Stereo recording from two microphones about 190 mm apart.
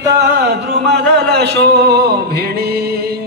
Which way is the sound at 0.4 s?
60° right (ahead or behind).